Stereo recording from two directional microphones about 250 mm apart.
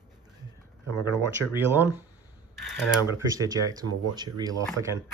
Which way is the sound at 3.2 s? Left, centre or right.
Centre.